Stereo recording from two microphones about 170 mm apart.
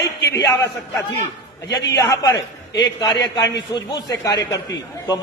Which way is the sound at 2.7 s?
25° left (ahead or behind).